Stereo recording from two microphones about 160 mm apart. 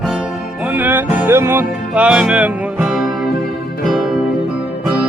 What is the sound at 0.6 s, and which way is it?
Music, 10° right (ahead or behind).